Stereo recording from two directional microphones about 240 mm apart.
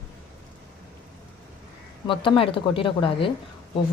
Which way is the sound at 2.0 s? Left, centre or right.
Left.